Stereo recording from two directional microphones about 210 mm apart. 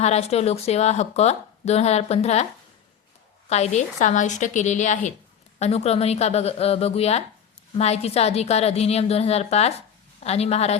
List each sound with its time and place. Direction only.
0.0 s a woman's voice: 30° left (ahead or behind)
3.5 s a woman's voice: 30° left (ahead or behind)